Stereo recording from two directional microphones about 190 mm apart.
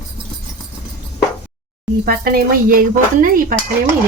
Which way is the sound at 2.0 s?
50° right (ahead or behind).